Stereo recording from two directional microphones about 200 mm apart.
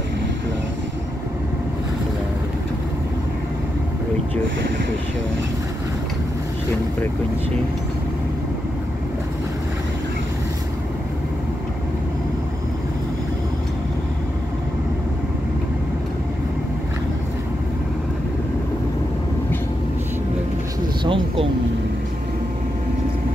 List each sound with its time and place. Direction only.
21.0 s vehicle: 25° right (ahead or behind)